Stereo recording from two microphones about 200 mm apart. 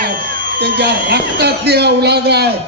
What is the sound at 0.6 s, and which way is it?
A man's voice, 55° right (ahead or behind).